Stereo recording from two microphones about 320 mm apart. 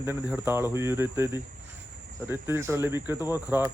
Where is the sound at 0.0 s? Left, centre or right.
Centre.